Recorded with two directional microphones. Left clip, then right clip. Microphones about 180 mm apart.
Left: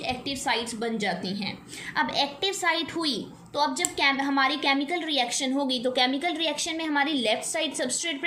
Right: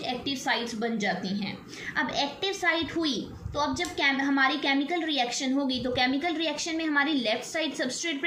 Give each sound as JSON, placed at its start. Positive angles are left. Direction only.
{"t": 0.1, "sound": "a woman's voice", "side_deg": 40}